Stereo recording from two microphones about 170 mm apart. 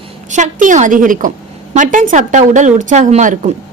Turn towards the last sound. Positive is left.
turn(degrees=-45)  # may be behind; listen again after turning